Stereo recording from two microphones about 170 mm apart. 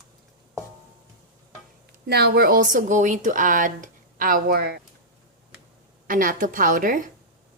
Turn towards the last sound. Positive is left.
turn(degrees=-55)  # may be behind; listen again after turning